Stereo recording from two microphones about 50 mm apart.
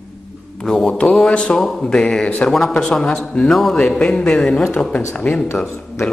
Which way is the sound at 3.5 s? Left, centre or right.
Centre.